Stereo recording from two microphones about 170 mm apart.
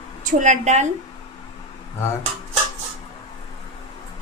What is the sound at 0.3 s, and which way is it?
Speech, 50° right (ahead or behind).